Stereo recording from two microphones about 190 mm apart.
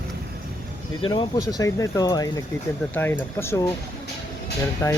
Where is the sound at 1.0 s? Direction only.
25° left (ahead or behind).